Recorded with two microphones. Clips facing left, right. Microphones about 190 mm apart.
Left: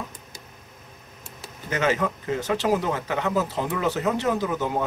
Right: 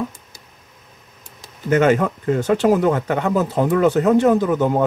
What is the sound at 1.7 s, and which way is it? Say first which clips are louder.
Speech: right 8 dB; 55° right (ahead or behind).